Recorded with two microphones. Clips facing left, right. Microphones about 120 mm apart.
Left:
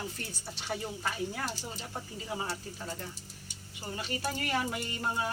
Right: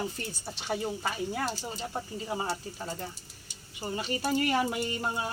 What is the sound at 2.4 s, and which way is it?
Speech, 20° right (ahead or behind).